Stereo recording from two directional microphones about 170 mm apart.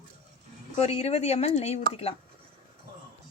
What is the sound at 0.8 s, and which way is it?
Speech, 40° left (ahead or behind).